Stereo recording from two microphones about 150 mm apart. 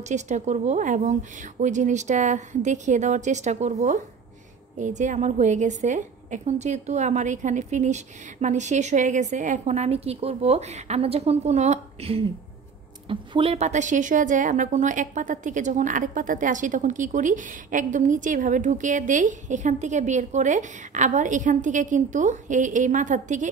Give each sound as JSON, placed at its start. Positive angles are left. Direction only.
{"t": 0.0, "sound": "a woman's voice", "side_deg": -50}